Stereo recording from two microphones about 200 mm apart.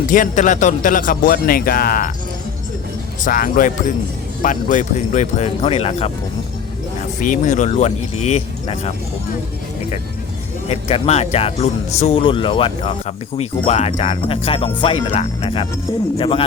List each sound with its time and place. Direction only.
0.1 s a man's voice: 40° left (ahead or behind)
3.2 s a man's voice: 40° left (ahead or behind)
7.2 s speech: 40° left (ahead or behind)
10.7 s speech: 30° left (ahead or behind)